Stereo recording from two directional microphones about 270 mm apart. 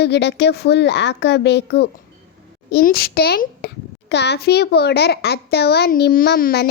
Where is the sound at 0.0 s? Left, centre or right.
Left.